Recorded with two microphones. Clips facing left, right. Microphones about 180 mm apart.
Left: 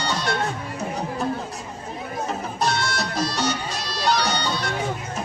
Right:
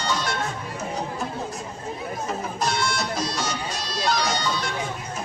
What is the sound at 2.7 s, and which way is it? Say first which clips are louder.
Music: even; 65° left (ahead or behind).